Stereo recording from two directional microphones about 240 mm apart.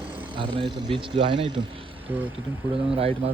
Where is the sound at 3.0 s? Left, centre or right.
Right.